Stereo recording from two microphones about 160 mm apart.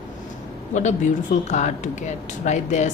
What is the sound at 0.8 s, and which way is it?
Speech, 50° left (ahead or behind).